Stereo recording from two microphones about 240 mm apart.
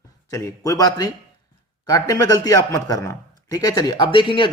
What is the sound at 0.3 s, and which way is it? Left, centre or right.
A man's voice, centre.